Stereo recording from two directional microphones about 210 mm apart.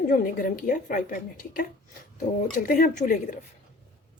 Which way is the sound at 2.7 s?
40° left (ahead or behind).